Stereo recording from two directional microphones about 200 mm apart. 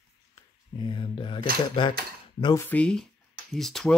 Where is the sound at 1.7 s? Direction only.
25° left (ahead or behind).